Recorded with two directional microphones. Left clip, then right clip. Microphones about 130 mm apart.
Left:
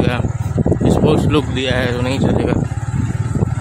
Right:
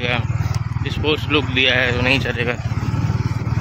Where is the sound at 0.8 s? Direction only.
90° left; by 2.0 s 55° left (ahead or behind).